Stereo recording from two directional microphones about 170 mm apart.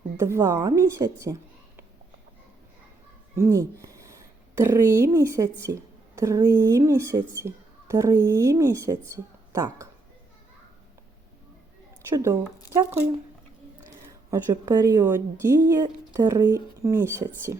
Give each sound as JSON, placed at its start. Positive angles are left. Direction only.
{"t": 0.2, "sound": "speech", "side_deg": -15}
{"t": 3.3, "sound": "speech", "side_deg": -15}
{"t": 12.1, "sound": "speech", "side_deg": -15}
{"t": 14.3, "sound": "a woman's voice", "side_deg": -20}